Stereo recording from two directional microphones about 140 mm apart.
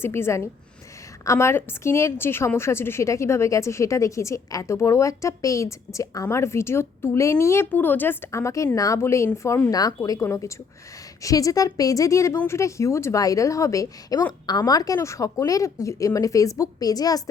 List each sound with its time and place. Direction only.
0.0 s a woman's voice: 20° left (ahead or behind)